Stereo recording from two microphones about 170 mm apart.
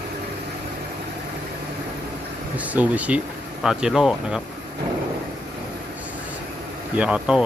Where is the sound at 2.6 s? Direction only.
10° right (ahead or behind).